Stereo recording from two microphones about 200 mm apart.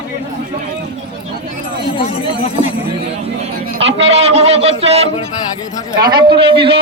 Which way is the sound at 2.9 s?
30° right (ahead or behind).